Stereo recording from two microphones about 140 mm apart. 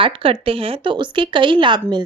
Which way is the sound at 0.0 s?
40° right (ahead or behind).